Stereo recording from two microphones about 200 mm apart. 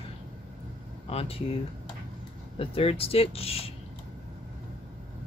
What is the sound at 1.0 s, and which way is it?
Speech, 30° left (ahead or behind).